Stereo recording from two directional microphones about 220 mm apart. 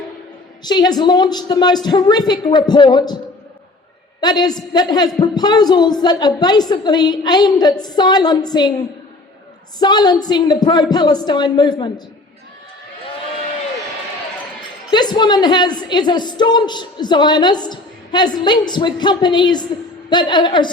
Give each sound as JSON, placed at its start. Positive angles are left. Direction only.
{"t": 0.6, "sound": "a woman's voice", "side_deg": 20}
{"t": 4.2, "sound": "a woman's voice", "side_deg": 20}
{"t": 9.7, "sound": "a woman's voice", "side_deg": 20}
{"t": 14.8, "sound": "a woman's voice", "side_deg": 20}